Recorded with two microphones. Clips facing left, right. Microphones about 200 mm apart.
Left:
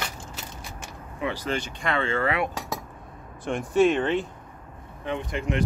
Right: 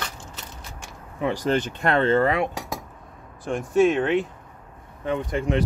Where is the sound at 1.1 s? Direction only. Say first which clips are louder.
Right 6 dB; 45° right (ahead or behind).